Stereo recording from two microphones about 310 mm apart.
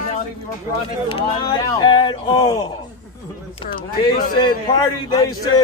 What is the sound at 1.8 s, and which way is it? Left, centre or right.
Speech, centre.